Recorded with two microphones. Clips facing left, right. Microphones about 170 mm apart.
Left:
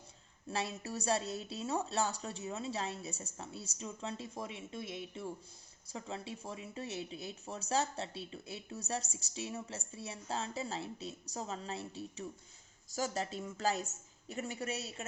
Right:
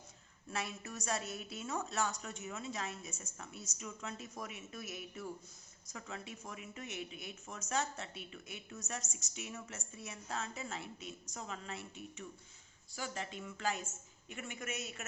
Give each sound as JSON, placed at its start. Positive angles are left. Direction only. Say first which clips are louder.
{"t": 0.5, "sound": "speech", "louder": "left 4 dB", "side_deg": 30}